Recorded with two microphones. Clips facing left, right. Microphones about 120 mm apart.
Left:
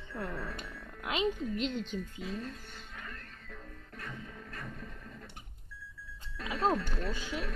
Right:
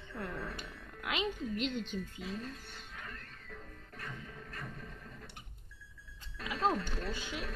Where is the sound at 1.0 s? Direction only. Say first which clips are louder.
Left 4 dB; 25° left (ahead or behind).